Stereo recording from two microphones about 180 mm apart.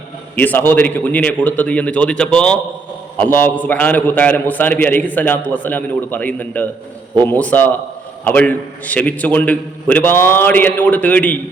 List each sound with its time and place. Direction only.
0.3 s a man's voice: 10° left (ahead or behind)